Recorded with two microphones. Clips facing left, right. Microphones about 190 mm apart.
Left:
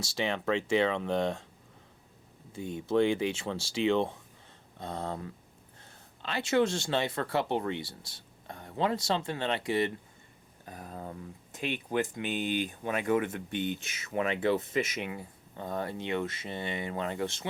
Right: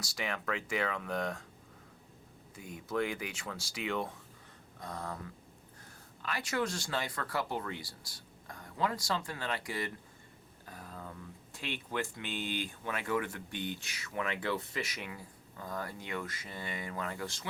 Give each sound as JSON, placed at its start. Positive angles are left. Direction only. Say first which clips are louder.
{"t": 0.0, "sound": "speech", "louder": "left 7 dB", "side_deg": 25}
{"t": 2.6, "sound": "speech", "louder": "left 8 dB", "side_deg": 25}
{"t": 10.9, "sound": "speech", "louder": "left 6 dB", "side_deg": 30}
{"t": 11.5, "sound": "speech", "louder": "left 7 dB", "side_deg": 20}